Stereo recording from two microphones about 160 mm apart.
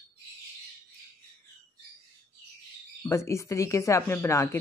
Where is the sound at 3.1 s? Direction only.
15° left (ahead or behind).